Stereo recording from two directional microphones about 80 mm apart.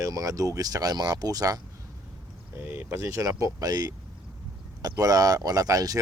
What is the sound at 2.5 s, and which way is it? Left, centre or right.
Speech, right.